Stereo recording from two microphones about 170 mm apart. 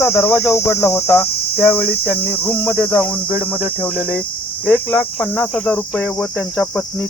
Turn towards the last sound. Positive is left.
turn(degrees=10)  # may be behind; listen again after turning